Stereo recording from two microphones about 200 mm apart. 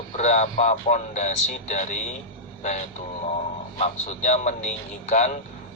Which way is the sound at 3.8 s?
35° left (ahead or behind).